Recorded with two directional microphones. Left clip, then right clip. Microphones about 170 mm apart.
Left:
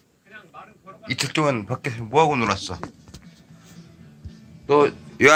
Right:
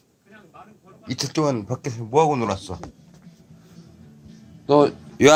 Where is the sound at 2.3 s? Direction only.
25° right (ahead or behind).